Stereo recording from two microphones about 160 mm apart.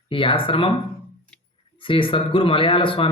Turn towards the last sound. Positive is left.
turn(degrees=35)  # may be behind; listen again after turning